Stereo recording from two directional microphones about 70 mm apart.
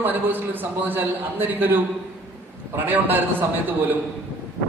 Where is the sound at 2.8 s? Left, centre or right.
Right.